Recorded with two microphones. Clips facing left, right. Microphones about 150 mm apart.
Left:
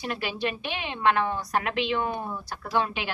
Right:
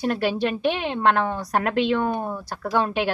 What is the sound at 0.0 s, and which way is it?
A woman's voice, 45° right (ahead or behind).